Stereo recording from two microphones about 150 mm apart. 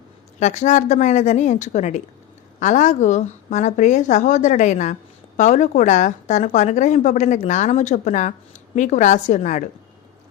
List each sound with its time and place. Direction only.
0.3 s a woman's voice: 50° left (ahead or behind)